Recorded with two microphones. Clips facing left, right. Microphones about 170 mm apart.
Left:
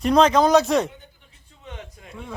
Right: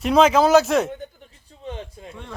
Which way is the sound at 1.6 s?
30° right (ahead or behind).